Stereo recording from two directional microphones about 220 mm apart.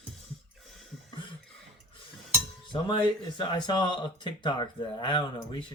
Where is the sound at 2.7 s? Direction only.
20° left (ahead or behind).